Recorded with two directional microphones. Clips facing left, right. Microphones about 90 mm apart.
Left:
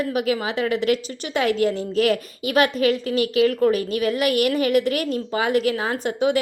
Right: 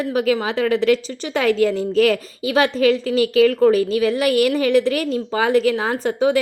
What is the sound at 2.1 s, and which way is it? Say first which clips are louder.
A woman's voice: right 2 dB; 30° right (ahead or behind).